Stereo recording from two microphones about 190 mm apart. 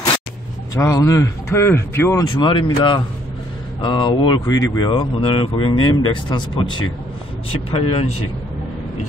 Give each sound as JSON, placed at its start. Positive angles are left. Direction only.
{"t": 0.7, "sound": "a man's voice", "side_deg": 15}